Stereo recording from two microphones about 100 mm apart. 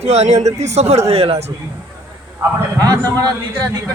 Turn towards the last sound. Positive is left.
turn(degrees=-40)  # may be behind; listen again after turning